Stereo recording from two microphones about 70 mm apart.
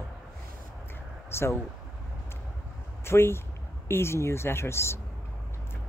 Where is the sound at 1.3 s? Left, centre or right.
Left.